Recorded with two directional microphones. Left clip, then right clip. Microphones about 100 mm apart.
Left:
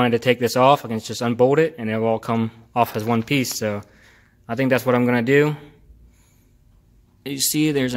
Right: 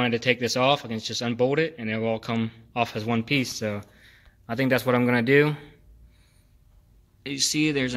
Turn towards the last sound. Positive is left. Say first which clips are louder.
# left 3 dB
turn(degrees=55)  # may be behind; listen again after turning